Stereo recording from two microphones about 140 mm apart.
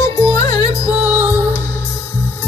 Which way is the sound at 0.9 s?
10° right (ahead or behind).